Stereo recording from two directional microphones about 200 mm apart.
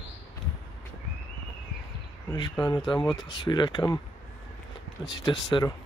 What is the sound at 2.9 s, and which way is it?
Speech, 25° left (ahead or behind).